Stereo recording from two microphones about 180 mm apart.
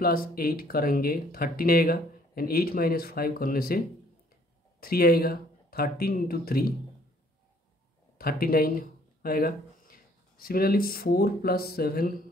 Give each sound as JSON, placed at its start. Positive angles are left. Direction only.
{"t": 0.0, "sound": "speech", "side_deg": 55}
{"t": 8.2, "sound": "speech", "side_deg": 55}